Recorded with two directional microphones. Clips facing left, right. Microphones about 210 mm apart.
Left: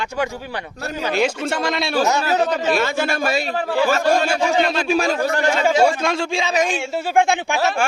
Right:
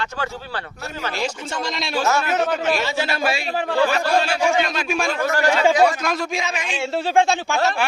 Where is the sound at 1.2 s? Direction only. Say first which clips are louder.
Left 6 dB; 65° left (ahead or behind); by 3.4 s 45° left (ahead or behind).